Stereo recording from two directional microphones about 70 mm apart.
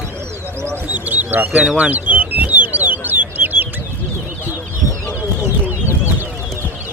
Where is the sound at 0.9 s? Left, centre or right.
Right.